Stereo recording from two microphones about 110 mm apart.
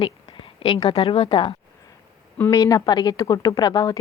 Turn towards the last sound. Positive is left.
turn(degrees=35)  # may be behind; listen again after turning